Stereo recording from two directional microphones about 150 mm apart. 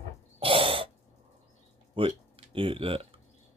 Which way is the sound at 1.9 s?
40° right (ahead or behind).